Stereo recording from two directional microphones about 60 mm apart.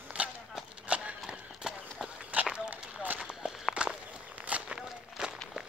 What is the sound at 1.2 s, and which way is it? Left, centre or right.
Horse, centre.